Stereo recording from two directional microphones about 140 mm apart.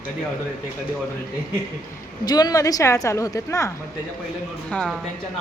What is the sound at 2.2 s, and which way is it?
A woman's voice, 30° left (ahead or behind).